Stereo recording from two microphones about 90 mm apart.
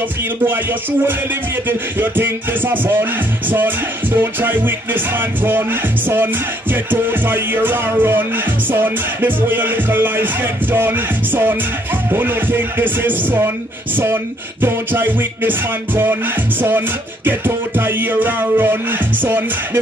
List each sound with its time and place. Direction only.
0.5 s music: 25° right (ahead or behind)